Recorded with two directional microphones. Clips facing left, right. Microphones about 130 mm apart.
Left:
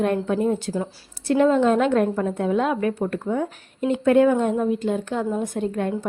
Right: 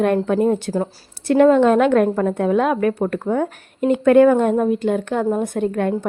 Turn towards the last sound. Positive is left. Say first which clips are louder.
# right 5 dB
turn(degrees=-65)  # may be behind; listen again after turning